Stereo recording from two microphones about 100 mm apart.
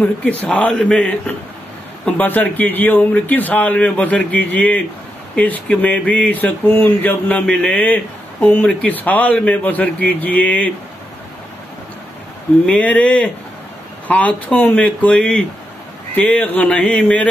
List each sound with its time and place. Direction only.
0.0 s speech: 15° left (ahead or behind)
12.6 s speech: 15° left (ahead or behind)